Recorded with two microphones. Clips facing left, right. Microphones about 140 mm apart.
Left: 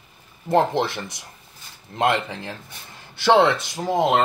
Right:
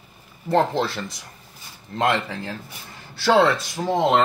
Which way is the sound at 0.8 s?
20° left (ahead or behind).